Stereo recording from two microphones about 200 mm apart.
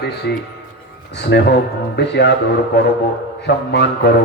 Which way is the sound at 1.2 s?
55° left (ahead or behind).